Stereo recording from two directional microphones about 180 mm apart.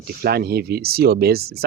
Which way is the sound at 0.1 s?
55° right (ahead or behind).